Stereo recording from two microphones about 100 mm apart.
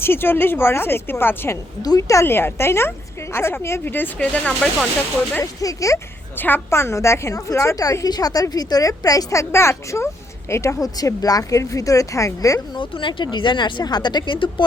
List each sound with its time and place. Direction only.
0.0 s speech: 20° left (ahead or behind)
1.8 s speech: 35° left (ahead or behind); by 4.7 s 10° left (ahead or behind)
5.4 s a woman's voice: 35° left (ahead or behind)
6.3 s a woman's voice: 20° left (ahead or behind)
12.7 s a woman's voice: 55° left (ahead or behind)